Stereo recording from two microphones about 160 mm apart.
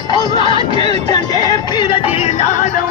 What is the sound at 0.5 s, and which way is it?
Music, 30° left (ahead or behind).